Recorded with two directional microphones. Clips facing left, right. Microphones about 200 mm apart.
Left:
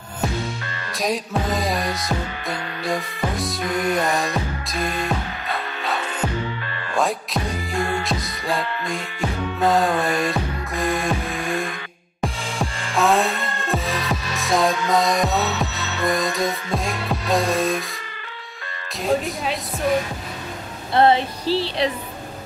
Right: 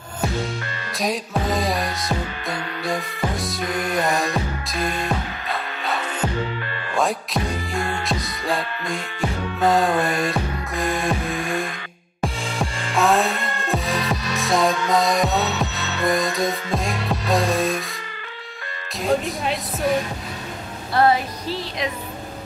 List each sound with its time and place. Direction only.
0.9 s music: centre (ahead or behind)
7.0 s music: centre (ahead or behind)
18.9 s music: centre (ahead or behind)
20.9 s music: 25° left (ahead or behind)